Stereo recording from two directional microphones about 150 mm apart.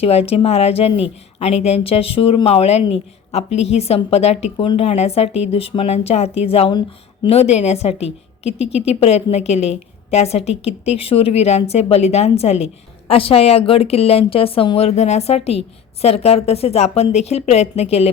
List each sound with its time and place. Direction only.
0.0 s a woman's voice: 40° left (ahead or behind)